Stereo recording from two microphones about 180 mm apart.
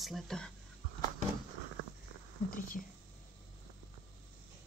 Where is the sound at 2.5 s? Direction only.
50° left (ahead or behind).